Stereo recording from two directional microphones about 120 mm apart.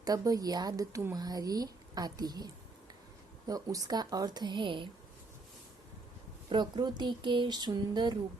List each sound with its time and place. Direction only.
0.0 s speech: 30° right (ahead or behind)
6.5 s speech: 40° right (ahead or behind)